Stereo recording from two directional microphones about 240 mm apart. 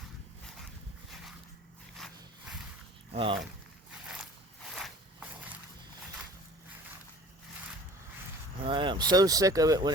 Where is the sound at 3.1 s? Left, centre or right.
Right.